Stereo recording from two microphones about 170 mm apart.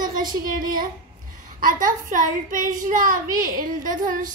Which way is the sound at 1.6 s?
55° right (ahead or behind).